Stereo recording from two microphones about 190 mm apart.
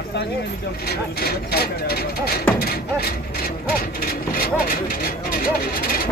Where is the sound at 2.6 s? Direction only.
55° left (ahead or behind).